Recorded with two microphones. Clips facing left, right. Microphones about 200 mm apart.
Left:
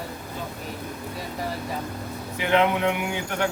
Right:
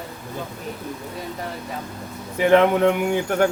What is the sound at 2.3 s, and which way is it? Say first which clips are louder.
Speech: right 6 dB; 45° right (ahead or behind).